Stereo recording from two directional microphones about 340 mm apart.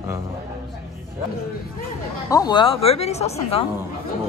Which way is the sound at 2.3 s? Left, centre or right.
Centre.